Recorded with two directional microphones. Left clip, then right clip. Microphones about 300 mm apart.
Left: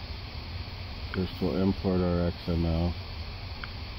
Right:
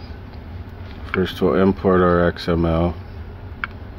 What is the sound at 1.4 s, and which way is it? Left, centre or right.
Speech, right.